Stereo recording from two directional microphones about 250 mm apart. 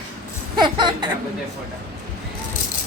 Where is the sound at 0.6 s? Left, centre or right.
Centre.